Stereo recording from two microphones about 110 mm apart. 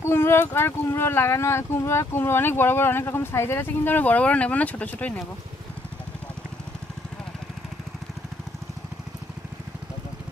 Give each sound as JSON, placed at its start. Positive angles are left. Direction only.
{"t": 0.0, "sound": "speech", "side_deg": 20}